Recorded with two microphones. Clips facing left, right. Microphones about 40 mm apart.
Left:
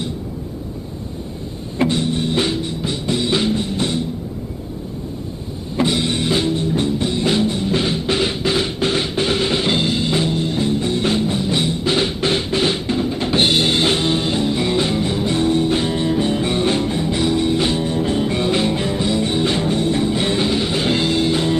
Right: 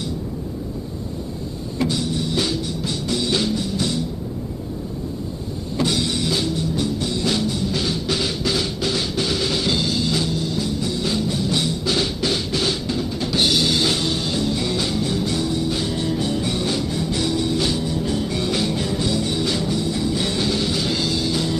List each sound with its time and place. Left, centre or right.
1.8 s music: left
5.8 s music: left